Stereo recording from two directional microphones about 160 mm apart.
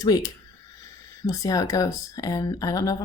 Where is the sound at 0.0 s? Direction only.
25° left (ahead or behind).